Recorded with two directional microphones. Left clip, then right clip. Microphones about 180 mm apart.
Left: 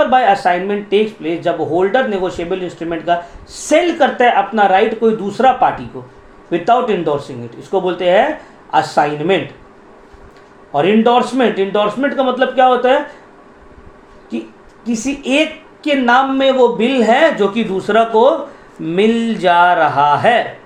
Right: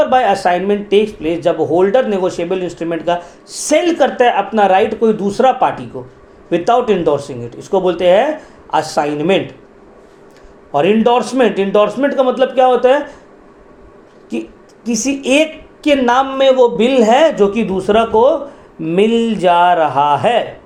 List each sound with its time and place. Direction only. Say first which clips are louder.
0.0 s speech: even; 45° right (ahead or behind)
10.7 s speech: even; 45° right (ahead or behind)
14.3 s speech: right 2 dB; 50° right (ahead or behind)